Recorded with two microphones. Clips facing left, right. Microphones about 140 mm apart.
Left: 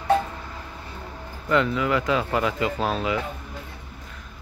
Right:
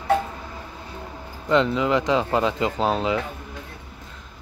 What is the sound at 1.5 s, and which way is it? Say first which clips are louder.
Speech: right 2 dB; 20° right (ahead or behind).